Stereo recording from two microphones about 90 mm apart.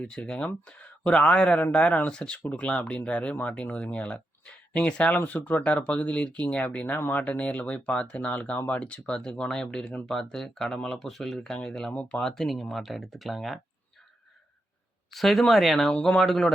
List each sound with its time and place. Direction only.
0.0 s speech: 10° left (ahead or behind)
15.1 s speech: centre (ahead or behind)